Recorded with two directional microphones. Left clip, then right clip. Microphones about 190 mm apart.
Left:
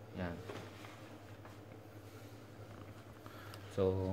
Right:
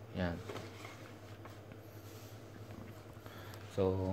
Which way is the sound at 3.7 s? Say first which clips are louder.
Even; centre (ahead or behind).